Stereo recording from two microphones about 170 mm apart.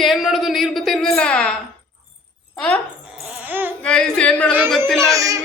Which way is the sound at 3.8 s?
5° left (ahead or behind).